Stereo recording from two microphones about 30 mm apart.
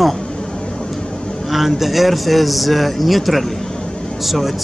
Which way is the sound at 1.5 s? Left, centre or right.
Centre.